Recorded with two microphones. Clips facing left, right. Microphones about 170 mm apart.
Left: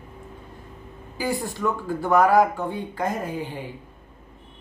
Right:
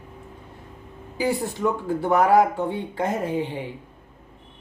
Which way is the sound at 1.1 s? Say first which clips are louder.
Right 3 dB; 20° right (ahead or behind).